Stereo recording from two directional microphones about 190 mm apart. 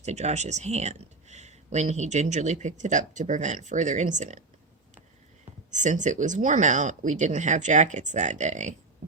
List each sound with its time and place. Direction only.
0.0 s speech: 35° right (ahead or behind)
5.7 s speech: 40° right (ahead or behind)